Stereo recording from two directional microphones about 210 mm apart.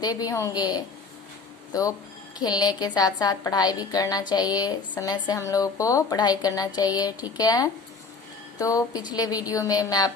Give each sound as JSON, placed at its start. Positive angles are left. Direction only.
{"t": 0.0, "sound": "a woman's voice", "side_deg": 20}